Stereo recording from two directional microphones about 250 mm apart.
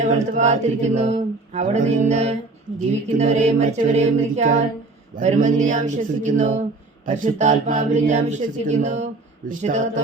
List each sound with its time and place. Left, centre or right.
0.0 s speech: right